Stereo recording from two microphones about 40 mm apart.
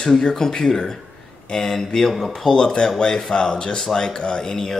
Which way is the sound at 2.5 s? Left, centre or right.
Centre.